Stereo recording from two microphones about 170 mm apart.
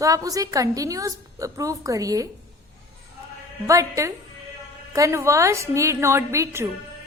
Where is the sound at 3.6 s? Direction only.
20° right (ahead or behind).